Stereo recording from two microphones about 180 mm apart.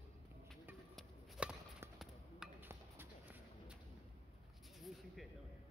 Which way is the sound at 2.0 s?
10° right (ahead or behind).